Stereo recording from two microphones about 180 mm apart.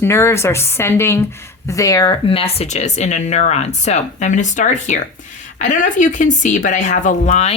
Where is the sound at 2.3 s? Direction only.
35° left (ahead or behind).